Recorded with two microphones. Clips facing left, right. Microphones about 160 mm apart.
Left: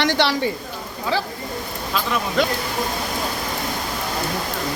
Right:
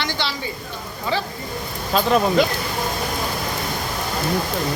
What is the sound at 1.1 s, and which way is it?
Speech, 5° left (ahead or behind).